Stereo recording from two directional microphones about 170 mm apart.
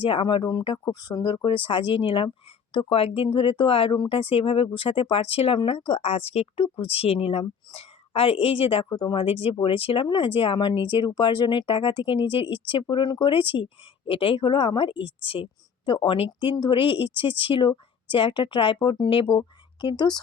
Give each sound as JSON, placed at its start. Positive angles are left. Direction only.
{"t": 0.0, "sound": "speech", "side_deg": 30}
{"t": 8.9, "sound": "speech", "side_deg": 25}
{"t": 9.2, "sound": "speech", "side_deg": 35}